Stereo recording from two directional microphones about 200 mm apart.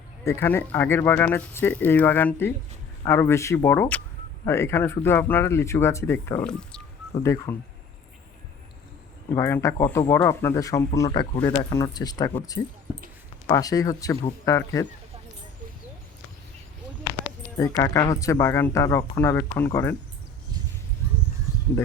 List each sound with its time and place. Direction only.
0.3 s speech: 10° left (ahead or behind)
9.3 s speech: 15° left (ahead or behind)
12.9 s a sound: 10° right (ahead or behind)
13.5 s speech: 15° left (ahead or behind)
17.6 s speech: 15° left (ahead or behind)